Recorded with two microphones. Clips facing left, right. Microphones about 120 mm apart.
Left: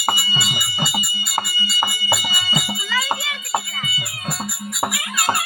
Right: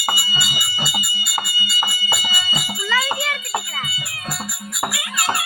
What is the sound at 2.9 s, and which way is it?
Music, 60° right (ahead or behind).